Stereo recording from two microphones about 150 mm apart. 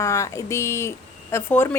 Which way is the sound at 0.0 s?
20° left (ahead or behind).